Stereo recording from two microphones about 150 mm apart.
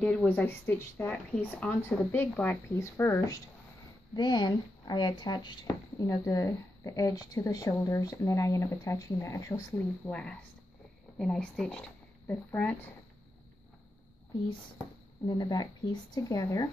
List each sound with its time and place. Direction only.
0.0 s speech: 10° left (ahead or behind)
4.1 s speech: 30° left (ahead or behind); by 12.7 s 10° left (ahead or behind)
15.2 s speech: 25° left (ahead or behind)